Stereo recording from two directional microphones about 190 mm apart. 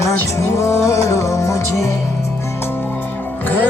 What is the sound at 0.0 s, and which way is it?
Music, 15° left (ahead or behind).